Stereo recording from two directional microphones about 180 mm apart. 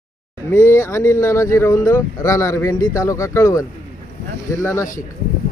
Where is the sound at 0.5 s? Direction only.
15° left (ahead or behind).